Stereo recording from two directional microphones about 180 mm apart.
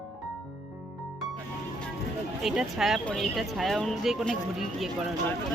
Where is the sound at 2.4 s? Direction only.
Centre (ahead or behind).